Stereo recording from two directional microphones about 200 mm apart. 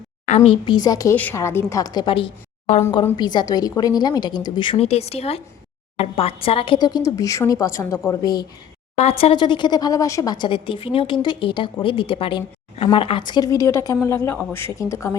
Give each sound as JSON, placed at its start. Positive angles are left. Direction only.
{"t": 0.3, "sound": "a woman's voice", "side_deg": 35}
{"t": 0.6, "sound": "a woman's voice", "side_deg": 20}
{"t": 9.0, "sound": "a woman's voice", "side_deg": 30}